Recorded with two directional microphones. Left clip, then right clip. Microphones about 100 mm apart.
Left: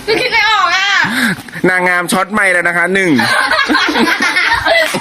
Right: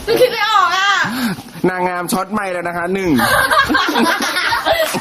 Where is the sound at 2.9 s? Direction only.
15° left (ahead or behind).